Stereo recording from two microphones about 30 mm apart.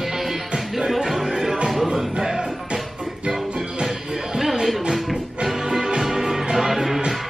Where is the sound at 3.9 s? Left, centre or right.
Centre.